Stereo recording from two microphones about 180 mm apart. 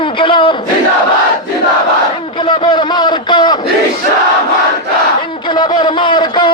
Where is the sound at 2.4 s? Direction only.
25° left (ahead or behind).